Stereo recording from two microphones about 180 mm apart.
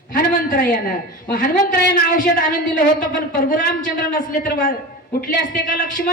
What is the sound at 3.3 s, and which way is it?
A man's voice, 50° left (ahead or behind).